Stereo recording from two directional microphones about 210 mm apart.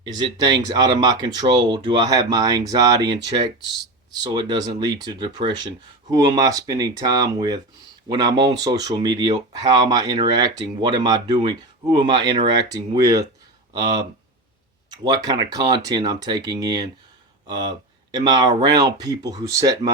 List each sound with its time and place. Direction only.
0.0 s speech: 20° right (ahead or behind)